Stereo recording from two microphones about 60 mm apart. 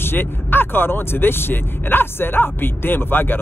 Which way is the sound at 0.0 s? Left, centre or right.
Left.